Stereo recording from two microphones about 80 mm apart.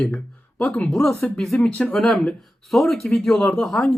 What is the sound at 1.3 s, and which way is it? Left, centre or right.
Speech, centre.